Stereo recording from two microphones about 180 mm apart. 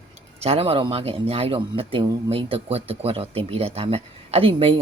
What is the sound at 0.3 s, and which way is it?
Speech, 35° right (ahead or behind).